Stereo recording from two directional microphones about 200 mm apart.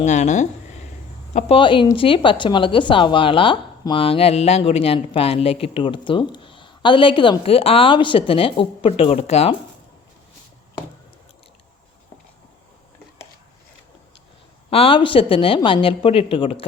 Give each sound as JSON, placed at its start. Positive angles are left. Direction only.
{"t": 0.0, "sound": "a woman's voice", "side_deg": 35}
{"t": 14.7, "sound": "a woman's voice", "side_deg": 30}